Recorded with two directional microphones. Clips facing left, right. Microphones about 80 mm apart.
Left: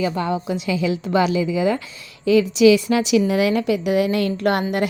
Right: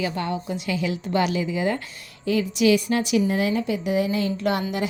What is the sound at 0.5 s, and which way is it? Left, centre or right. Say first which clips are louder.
Speech: left 5 dB; left.